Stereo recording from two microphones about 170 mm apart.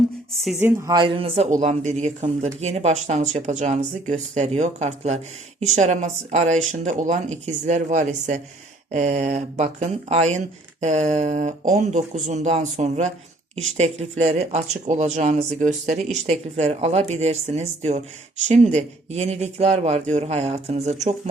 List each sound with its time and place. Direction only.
0.6 s speech: 15° right (ahead or behind)
0.9 s speech: 30° right (ahead or behind)
1.5 s speech: 45° right (ahead or behind)